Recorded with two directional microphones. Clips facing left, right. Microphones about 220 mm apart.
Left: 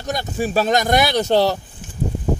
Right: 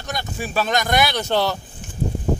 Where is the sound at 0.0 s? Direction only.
40° left (ahead or behind).